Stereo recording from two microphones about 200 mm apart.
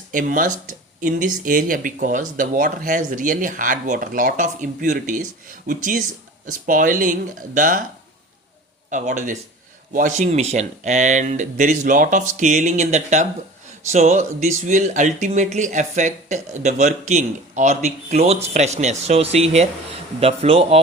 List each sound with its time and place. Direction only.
0.1 s speech: 40° right (ahead or behind)
8.9 s speech: 40° right (ahead or behind)